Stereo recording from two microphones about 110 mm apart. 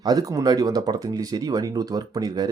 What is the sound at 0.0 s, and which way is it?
Speech, 35° right (ahead or behind).